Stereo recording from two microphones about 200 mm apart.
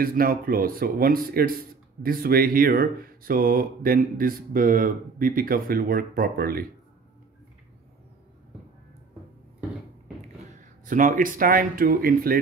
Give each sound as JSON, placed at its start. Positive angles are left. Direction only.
{"t": 0.0, "sound": "speech", "side_deg": -45}
{"t": 10.9, "sound": "speech", "side_deg": -40}